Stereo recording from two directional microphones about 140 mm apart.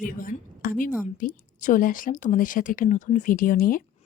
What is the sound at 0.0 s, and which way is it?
A woman's voice, 85° left.